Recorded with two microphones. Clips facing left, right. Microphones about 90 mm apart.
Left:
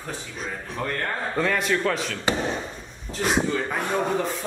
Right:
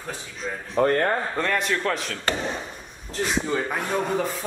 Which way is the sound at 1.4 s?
Centre (ahead or behind).